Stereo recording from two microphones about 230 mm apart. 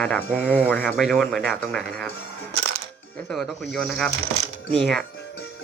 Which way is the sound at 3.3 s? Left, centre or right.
Centre.